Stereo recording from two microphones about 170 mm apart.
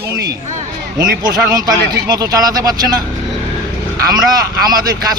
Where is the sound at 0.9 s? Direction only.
20° right (ahead or behind).